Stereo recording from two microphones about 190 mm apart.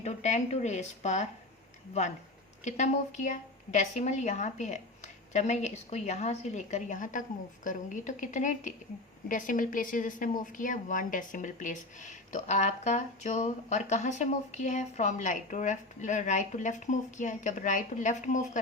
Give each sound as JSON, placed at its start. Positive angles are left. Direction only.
{"t": 0.0, "sound": "a woman's voice", "side_deg": 35}